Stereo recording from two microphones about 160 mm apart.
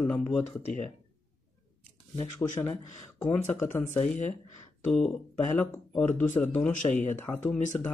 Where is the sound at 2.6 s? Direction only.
20° left (ahead or behind).